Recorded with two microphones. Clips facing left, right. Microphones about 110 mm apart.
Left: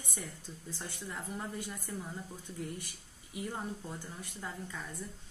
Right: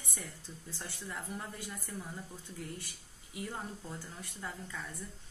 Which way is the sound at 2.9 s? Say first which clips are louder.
Left 1 dB; 25° left (ahead or behind).